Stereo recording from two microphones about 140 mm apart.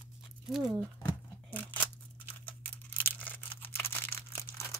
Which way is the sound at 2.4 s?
10° left (ahead or behind).